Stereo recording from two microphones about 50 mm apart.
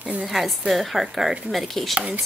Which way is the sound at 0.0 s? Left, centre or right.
Right.